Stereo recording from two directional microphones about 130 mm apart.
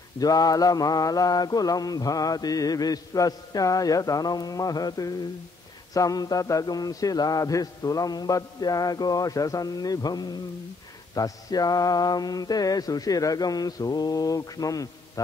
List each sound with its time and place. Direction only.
0.2 s mantra: 30° left (ahead or behind)